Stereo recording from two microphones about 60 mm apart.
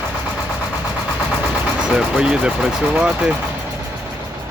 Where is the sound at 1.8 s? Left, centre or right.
Centre.